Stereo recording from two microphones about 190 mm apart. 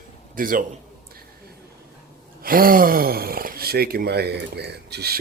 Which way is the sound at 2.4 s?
50° right (ahead or behind).